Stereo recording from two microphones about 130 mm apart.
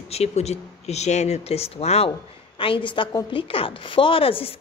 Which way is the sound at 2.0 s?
40° left (ahead or behind).